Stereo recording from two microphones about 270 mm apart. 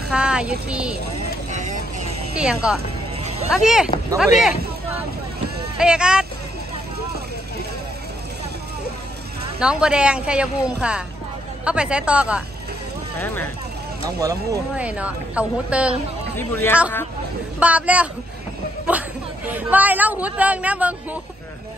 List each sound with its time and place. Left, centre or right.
0.1 s speech: centre
1.5 s vehicle: right
2.3 s speech: centre
4.4 s a sound: centre
5.8 s speech: centre
9.6 s speech: centre
13.2 s speech: centre
14.2 s speech: centre
16.3 s speech: centre
17.6 s a woman's voice: centre